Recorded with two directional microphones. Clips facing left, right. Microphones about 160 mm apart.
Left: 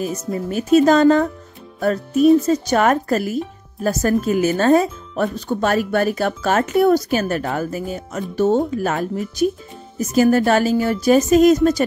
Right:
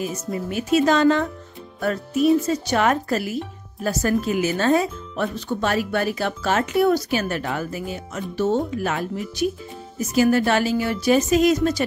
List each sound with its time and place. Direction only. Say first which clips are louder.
0.5 s speech: left 5 dB; 40° left (ahead or behind)
2.4 s speech: left 4 dB; 40° left (ahead or behind)